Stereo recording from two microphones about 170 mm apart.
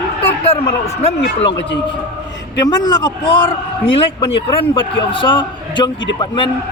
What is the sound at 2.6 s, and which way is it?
A man's voice, 20° left (ahead or behind).